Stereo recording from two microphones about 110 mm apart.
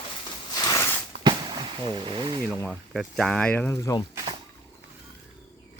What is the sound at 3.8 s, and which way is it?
Speech, 35° left (ahead or behind).